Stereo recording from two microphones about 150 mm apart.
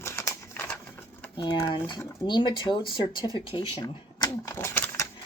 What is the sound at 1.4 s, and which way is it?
A woman's voice, 25° left (ahead or behind).